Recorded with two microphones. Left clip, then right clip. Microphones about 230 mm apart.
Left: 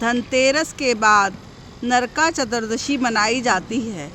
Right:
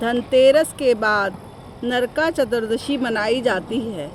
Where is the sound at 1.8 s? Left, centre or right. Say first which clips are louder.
Left 2 dB; left.